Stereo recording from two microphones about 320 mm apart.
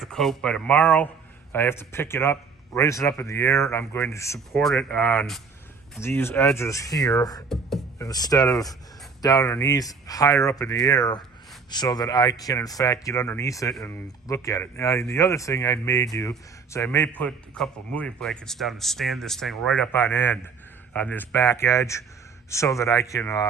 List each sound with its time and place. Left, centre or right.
0.0 s speech: centre
7.5 s speech: centre